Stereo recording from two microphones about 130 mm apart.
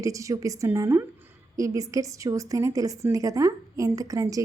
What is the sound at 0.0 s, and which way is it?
A woman's voice, 25° right (ahead or behind).